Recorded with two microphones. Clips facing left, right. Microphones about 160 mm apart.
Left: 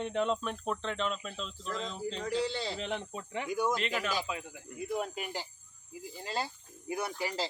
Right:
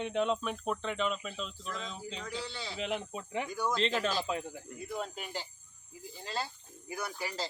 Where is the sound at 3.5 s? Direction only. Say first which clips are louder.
Left 3 dB; 15° left (ahead or behind).